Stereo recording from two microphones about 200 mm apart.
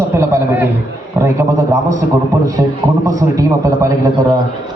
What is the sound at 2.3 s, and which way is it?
A man's voice, 15° right (ahead or behind).